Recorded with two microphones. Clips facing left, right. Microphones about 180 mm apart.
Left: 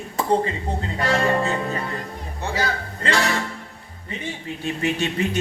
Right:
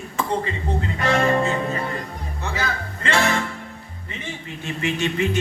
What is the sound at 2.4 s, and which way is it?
Speech, 35° left (ahead or behind).